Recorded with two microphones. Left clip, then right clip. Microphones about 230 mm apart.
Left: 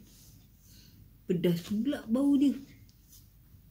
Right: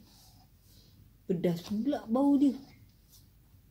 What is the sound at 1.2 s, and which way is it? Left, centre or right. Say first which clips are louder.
Speech: left 1 dB; right.